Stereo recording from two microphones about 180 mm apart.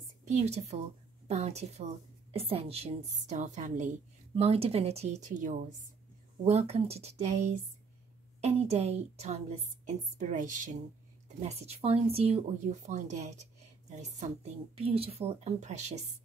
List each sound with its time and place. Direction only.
0.3 s speech: 40° right (ahead or behind)